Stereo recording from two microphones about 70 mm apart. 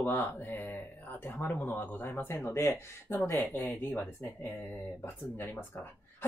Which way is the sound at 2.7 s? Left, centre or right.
Left.